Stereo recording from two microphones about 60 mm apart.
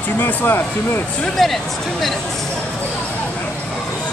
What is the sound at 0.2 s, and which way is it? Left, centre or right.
Speech, left.